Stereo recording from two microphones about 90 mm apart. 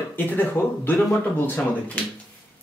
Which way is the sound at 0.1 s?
20° left (ahead or behind).